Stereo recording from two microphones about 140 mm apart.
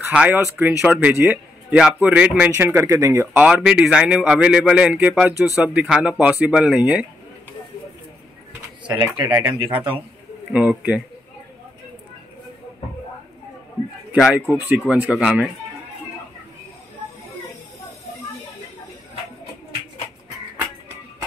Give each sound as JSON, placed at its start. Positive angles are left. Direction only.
{"t": 0.0, "sound": "a man's voice", "side_deg": -10}
{"t": 1.7, "sound": "a man's voice", "side_deg": -5}
{"t": 3.4, "sound": "a man's voice", "side_deg": -10}
{"t": 9.1, "sound": "speech", "side_deg": -20}
{"t": 9.7, "sound": "a man's voice", "side_deg": -35}
{"t": 10.5, "sound": "a man's voice", "side_deg": -10}
{"t": 14.1, "sound": "a man's voice", "side_deg": -5}